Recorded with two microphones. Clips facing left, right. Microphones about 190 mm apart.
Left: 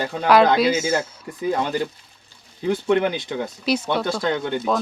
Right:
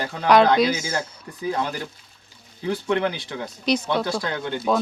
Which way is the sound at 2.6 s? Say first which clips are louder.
Left 4 dB; 15° left (ahead or behind).